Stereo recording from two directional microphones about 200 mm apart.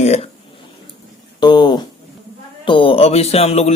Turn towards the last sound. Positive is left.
turn(degrees=30)  # may be behind; listen again after turning